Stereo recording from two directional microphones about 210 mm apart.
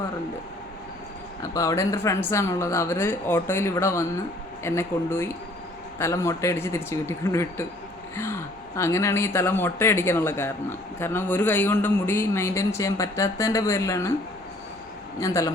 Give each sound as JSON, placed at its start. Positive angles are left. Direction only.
{"t": 1.4, "sound": "speech", "side_deg": 15}
{"t": 15.2, "sound": "speech", "side_deg": 15}